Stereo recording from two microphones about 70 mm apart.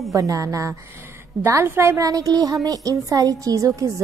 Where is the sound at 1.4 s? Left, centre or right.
Right.